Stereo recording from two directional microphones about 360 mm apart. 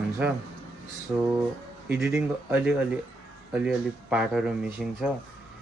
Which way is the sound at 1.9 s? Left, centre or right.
Centre.